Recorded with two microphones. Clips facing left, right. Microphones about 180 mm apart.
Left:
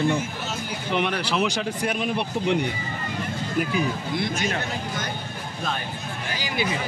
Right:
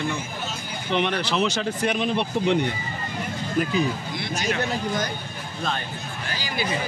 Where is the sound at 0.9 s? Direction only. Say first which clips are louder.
Right 1 dB; 5° left (ahead or behind).